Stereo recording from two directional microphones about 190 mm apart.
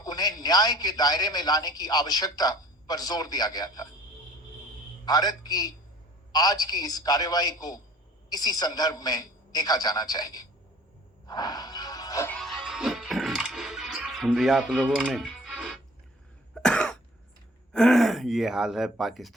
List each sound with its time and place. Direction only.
0.0 s a man's voice: 20° left (ahead or behind)
5.0 s a man's voice: 20° left (ahead or behind)
11.3 s music: 20° left (ahead or behind)
12.4 s music: centre (ahead or behind)
16.6 s cough: 5° left (ahead or behind)
17.7 s speech: centre (ahead or behind)